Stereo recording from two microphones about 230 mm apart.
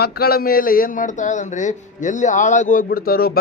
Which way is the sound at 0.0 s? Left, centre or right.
Left.